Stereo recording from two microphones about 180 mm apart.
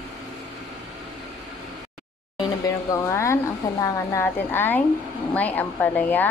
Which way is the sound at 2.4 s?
20° left (ahead or behind).